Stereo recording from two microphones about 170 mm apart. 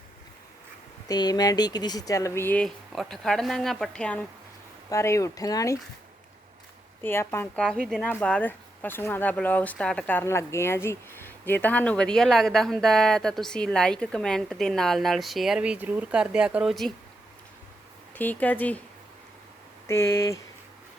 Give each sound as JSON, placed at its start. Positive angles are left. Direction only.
{"t": 1.0, "sound": "speech", "side_deg": 25}
{"t": 4.9, "sound": "speech", "side_deg": 15}
{"t": 7.0, "sound": "speech", "side_deg": 15}
{"t": 18.1, "sound": "speech", "side_deg": 10}
{"t": 19.9, "sound": "speech", "side_deg": 15}